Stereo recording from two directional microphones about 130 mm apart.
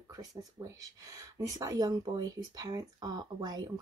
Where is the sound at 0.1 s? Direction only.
30° right (ahead or behind).